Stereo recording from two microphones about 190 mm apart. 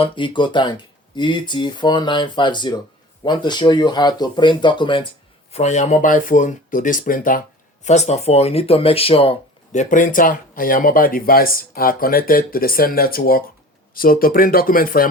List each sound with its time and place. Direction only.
0.0 s speech: 25° left (ahead or behind)
5.5 s speech: 35° left (ahead or behind)
7.9 s speech: 35° left (ahead or behind)
9.7 s speech: 45° left (ahead or behind)